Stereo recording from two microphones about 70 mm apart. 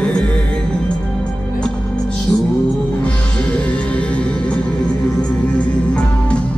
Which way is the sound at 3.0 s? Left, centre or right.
Centre.